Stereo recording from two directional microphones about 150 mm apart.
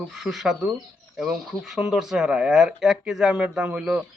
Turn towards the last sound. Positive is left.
turn(degrees=-5)  # may be behind; listen again after turning